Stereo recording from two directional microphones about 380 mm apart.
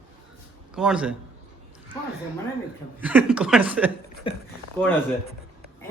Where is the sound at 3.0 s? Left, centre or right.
Centre.